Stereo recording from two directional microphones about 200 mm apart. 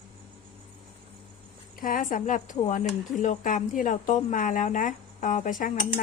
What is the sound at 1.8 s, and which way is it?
Speech, 45° left (ahead or behind).